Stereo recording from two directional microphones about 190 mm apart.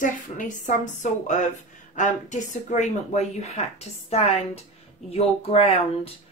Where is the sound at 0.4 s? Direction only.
40° left (ahead or behind).